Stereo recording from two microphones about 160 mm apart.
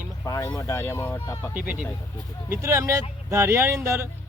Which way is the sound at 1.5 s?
10° right (ahead or behind).